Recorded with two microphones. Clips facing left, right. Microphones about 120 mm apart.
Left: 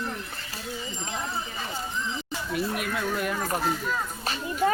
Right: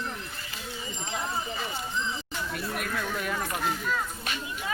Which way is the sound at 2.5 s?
5° left (ahead or behind).